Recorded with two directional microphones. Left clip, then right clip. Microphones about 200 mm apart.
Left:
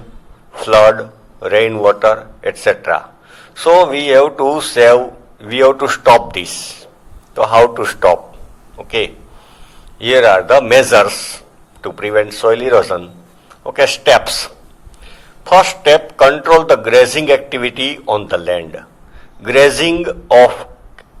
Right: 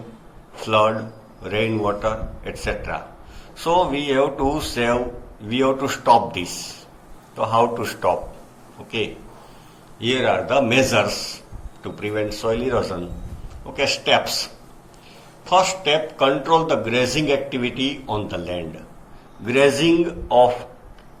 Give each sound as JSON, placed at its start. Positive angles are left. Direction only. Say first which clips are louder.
{"t": 0.5, "sound": "a man's voice", "louder": "left 10 dB", "side_deg": 55}